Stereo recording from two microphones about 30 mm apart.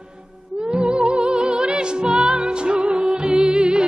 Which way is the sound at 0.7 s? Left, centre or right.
Right.